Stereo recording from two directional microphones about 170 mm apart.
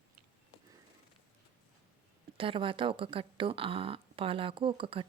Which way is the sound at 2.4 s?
30° right (ahead or behind).